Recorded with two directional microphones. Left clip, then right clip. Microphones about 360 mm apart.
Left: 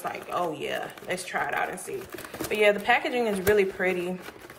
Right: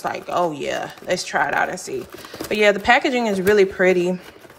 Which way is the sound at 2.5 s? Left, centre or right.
Centre.